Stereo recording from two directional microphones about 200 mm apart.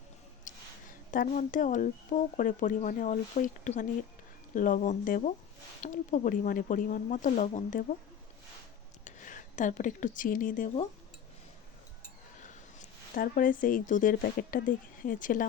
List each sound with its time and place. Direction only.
0.4 s speech: 40° left (ahead or behind)
9.0 s speech: 40° left (ahead or behind)
12.4 s speech: 40° left (ahead or behind)